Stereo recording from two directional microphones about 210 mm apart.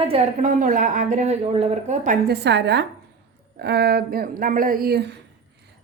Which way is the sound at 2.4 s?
55° right (ahead or behind).